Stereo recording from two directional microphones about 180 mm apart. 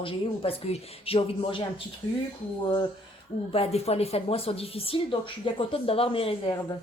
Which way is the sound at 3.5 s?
35° left (ahead or behind).